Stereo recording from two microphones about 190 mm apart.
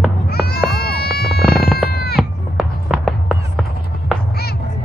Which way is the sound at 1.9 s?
55° left (ahead or behind).